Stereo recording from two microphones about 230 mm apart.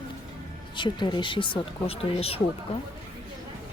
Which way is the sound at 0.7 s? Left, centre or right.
Centre.